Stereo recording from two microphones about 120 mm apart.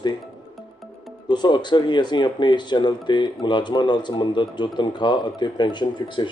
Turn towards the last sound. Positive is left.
turn(degrees=45)  # may be behind; listen again after turning